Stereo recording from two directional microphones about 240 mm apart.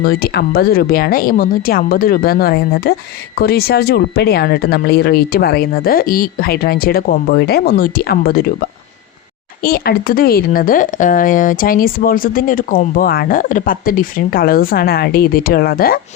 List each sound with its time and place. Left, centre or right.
0.0 s a woman's voice: left
9.6 s a woman's voice: left